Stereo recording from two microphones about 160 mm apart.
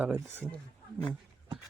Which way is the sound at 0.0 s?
10° right (ahead or behind).